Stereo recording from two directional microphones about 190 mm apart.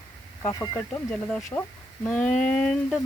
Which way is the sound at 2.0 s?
5° left (ahead or behind).